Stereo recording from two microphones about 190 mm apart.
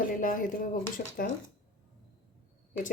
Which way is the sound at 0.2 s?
45° left (ahead or behind).